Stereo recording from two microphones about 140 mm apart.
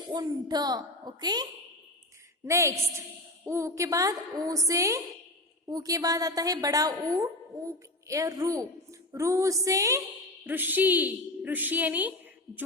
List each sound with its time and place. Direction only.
0.1 s a woman's voice: 30° right (ahead or behind)
10.4 s a woman's voice: 15° right (ahead or behind)